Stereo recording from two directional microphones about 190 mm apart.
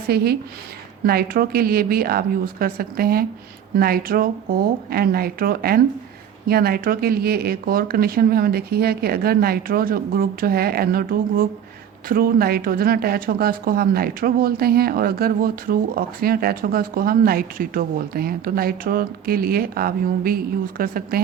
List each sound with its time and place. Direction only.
0.1 s speech: 55° right (ahead or behind)